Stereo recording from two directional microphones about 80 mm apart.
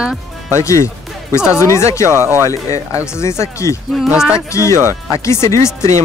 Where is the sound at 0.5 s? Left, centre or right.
Left.